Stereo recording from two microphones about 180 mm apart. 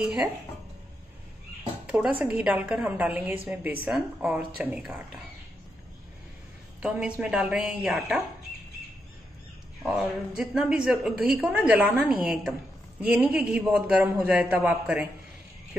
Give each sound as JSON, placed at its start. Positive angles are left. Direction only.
{"t": 1.9, "sound": "a man's voice", "side_deg": -10}
{"t": 6.8, "sound": "a woman's voice", "side_deg": -5}
{"t": 9.8, "sound": "a woman's voice", "side_deg": -5}